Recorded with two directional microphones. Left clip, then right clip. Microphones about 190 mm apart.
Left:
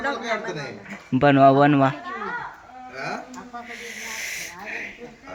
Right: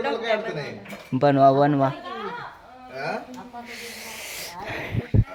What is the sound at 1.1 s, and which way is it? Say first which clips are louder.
Speech: left 2 dB; 5° left (ahead or behind).